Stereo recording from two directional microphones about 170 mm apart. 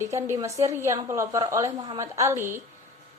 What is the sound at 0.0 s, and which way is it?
A woman's voice, 15° right (ahead or behind).